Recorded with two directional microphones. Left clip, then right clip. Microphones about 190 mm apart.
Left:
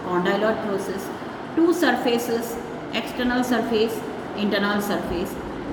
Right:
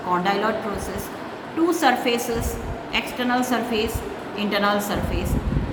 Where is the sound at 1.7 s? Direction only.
30° right (ahead or behind).